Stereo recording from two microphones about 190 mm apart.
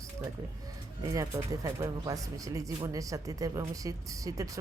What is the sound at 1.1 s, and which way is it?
Speech, 20° right (ahead or behind).